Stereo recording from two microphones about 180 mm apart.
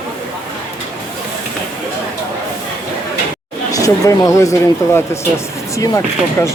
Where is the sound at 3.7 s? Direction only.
20° left (ahead or behind).